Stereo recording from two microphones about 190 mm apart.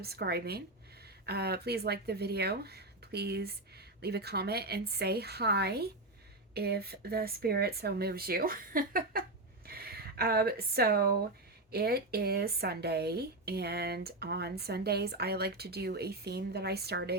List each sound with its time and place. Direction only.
0.0 s speech: 55° right (ahead or behind)